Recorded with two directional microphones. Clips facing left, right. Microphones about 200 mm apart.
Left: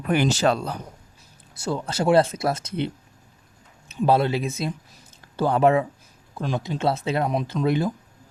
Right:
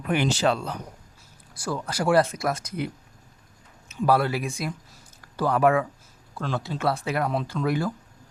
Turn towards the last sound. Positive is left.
turn(degrees=20)  # may be behind; listen again after turning